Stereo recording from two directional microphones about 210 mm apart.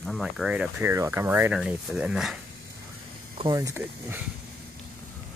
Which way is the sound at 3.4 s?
15° right (ahead or behind).